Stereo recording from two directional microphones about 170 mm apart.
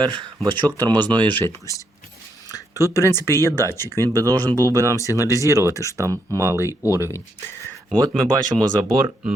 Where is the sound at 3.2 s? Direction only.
20° right (ahead or behind).